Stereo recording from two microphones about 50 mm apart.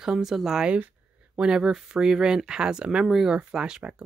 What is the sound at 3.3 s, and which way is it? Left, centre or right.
Speech, centre.